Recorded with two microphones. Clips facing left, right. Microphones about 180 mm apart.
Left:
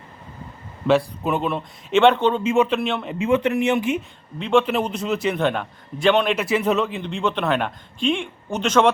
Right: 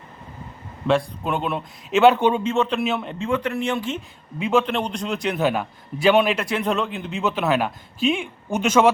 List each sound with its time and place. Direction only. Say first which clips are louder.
0.9 s a man's voice: left 2 dB; 5° left (ahead or behind)
2.4 s a man's voice: left 2 dB; 10° left (ahead or behind)
3.2 s speech: left 9 dB; 20° left (ahead or behind)
4.4 s a man's voice: left 2 dB; 10° right (ahead or behind)
4.6 s a man's voice: left 2 dB; 5° left (ahead or behind)